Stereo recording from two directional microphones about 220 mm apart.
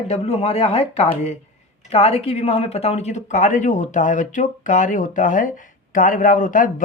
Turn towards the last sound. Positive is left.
turn(degrees=35)  # may be behind; listen again after turning